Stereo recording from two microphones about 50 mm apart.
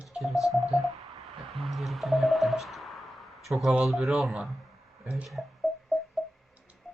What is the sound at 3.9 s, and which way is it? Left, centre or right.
Speech, centre.